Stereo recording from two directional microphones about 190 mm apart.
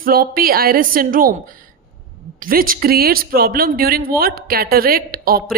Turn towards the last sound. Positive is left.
turn(degrees=-50)  # may be behind; listen again after turning